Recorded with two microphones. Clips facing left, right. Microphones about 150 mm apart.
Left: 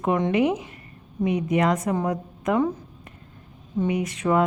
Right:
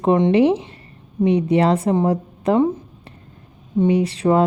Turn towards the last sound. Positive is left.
turn(degrees=-30)  # may be behind; listen again after turning